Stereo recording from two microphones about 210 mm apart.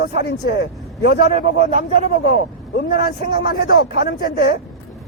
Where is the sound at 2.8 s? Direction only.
45° left (ahead or behind).